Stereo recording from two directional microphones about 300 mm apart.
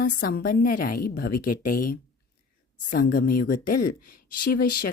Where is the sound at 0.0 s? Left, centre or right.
Left.